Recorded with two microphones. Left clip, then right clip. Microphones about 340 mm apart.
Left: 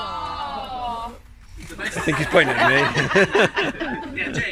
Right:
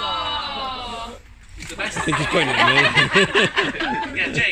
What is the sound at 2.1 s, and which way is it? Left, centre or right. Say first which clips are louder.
Speech: left 3 dB; left.